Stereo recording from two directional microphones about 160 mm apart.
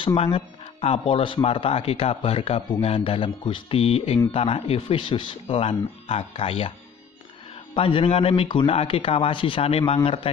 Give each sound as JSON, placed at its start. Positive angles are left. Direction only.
{"t": 0.0, "sound": "speech", "side_deg": 35}
{"t": 7.7, "sound": "speech", "side_deg": 35}